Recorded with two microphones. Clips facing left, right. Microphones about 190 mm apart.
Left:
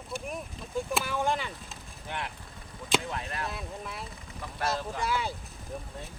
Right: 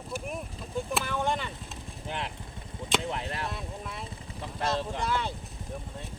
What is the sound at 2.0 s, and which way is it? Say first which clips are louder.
Speech: right 1 dB; 25° right (ahead or behind).